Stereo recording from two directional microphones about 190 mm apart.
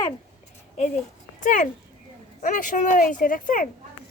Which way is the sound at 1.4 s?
40° left (ahead or behind).